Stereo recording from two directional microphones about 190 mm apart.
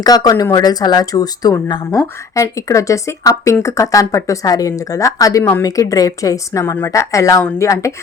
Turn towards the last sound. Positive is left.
turn(degrees=15)  # may be behind; listen again after turning